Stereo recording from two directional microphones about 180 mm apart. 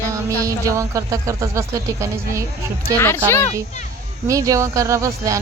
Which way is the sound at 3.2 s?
15° left (ahead or behind).